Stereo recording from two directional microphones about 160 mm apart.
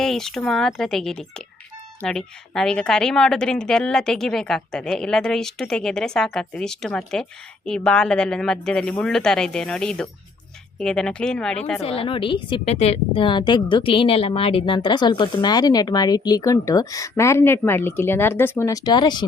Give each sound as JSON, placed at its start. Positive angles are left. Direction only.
{"t": 0.0, "sound": "a woman's voice", "side_deg": 5}
{"t": 11.8, "sound": "a woman's voice", "side_deg": 40}